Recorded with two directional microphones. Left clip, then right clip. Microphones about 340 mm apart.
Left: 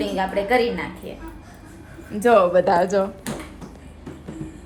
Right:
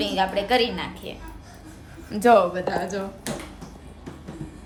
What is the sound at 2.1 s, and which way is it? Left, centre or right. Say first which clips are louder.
Speech: even; right.